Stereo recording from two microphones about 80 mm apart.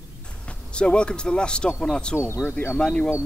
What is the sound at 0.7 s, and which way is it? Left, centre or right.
Speech, centre.